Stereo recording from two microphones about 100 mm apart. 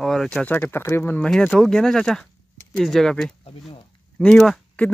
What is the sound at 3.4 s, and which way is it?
Speech, 70° left (ahead or behind).